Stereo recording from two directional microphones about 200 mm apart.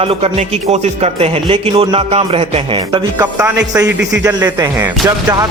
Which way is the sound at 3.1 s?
15° right (ahead or behind).